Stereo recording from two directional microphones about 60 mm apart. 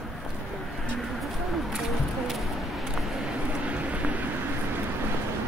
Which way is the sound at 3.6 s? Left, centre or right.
Right.